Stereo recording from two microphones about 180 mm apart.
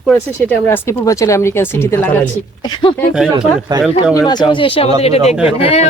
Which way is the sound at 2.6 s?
25° left (ahead or behind).